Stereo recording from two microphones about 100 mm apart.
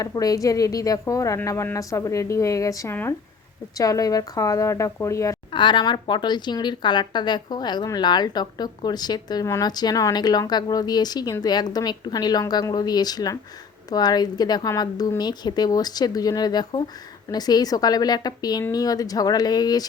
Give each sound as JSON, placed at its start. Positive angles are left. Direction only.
{"t": 0.0, "sound": "a woman's voice", "side_deg": 35}
{"t": 2.9, "sound": "speech", "side_deg": 20}
{"t": 3.8, "sound": "a woman's voice", "side_deg": 35}
{"t": 5.5, "sound": "a woman's voice", "side_deg": 50}